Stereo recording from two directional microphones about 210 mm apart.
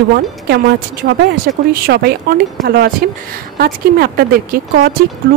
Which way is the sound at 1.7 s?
50° right (ahead or behind).